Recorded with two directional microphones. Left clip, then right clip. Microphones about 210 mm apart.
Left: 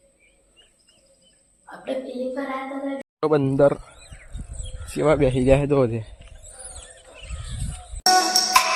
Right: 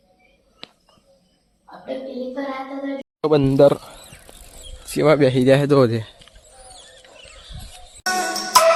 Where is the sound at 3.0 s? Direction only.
5° right (ahead or behind).